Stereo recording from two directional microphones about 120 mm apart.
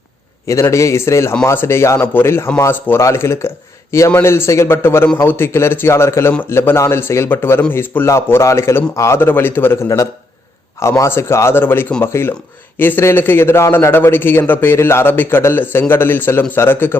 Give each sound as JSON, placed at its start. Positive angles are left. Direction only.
{"t": 0.4, "sound": "a man's voice", "side_deg": 25}